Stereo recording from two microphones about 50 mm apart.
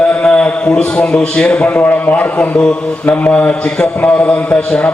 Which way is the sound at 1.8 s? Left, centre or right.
Left.